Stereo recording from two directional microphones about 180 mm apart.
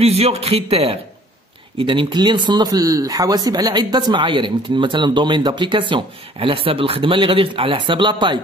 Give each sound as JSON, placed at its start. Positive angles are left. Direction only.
{"t": 0.0, "sound": "speech", "side_deg": -35}